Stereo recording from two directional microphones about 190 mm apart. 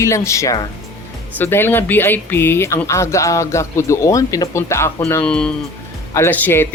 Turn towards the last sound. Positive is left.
turn(degrees=10)  # may be behind; listen again after turning